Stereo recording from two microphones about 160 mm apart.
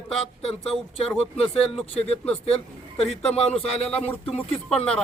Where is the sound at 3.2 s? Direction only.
40° left (ahead or behind).